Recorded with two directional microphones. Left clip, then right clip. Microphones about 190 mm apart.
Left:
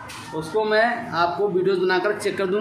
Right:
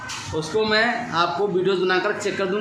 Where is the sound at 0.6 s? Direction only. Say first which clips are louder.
Left 1 dB; 20° right (ahead or behind).